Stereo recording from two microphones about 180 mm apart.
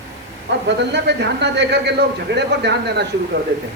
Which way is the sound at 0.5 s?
70° right (ahead or behind).